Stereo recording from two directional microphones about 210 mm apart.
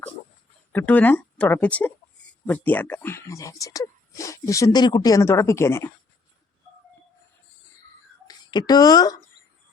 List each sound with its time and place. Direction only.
0.7 s speech: 5° left (ahead or behind)
8.3 s speech: 20° left (ahead or behind)